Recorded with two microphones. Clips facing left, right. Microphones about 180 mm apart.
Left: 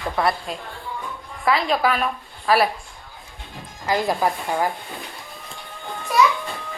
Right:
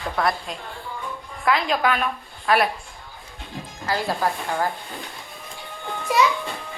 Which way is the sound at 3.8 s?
15° left (ahead or behind).